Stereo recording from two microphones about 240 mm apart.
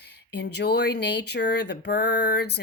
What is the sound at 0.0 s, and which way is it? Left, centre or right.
Speech, left.